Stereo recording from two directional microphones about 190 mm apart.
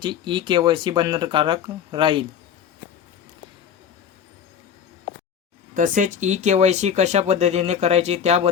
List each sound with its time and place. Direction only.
0.0 s speech: 25° right (ahead or behind)
5.7 s speech: 45° right (ahead or behind)